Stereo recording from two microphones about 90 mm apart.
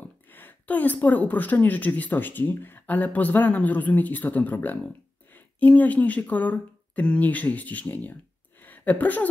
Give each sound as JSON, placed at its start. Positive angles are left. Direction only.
{"t": 0.3, "sound": "a woman's voice", "side_deg": 20}